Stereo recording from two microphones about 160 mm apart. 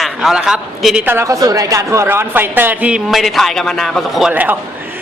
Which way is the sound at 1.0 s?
15° right (ahead or behind).